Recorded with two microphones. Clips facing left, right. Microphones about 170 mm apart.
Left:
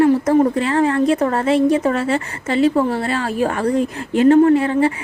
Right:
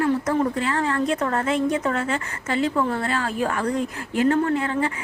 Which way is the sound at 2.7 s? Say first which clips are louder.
Left 5 dB; 35° left (ahead or behind).